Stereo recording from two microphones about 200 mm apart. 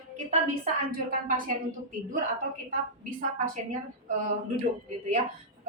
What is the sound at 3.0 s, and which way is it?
A woman's voice, 40° right (ahead or behind).